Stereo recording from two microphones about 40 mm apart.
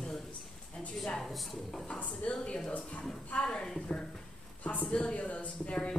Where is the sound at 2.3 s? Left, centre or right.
Left.